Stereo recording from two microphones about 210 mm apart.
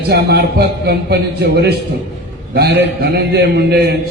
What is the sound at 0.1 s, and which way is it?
A man's voice, 50° right (ahead or behind).